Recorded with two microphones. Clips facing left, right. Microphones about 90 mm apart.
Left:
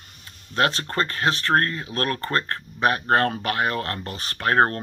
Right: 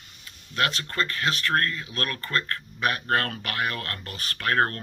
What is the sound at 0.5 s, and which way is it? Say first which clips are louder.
Speech: left 4 dB; 35° left (ahead or behind).